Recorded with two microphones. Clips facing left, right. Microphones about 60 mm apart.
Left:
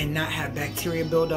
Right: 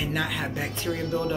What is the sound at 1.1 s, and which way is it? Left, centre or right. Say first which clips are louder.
Speech: left 6 dB; centre.